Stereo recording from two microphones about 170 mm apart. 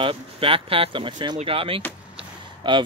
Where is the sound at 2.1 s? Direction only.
30° right (ahead or behind).